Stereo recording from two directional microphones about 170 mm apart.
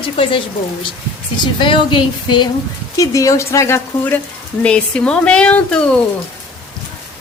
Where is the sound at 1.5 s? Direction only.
30° left (ahead or behind); by 6.0 s 5° left (ahead or behind).